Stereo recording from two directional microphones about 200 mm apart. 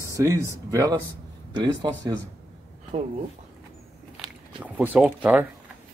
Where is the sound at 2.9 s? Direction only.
35° right (ahead or behind).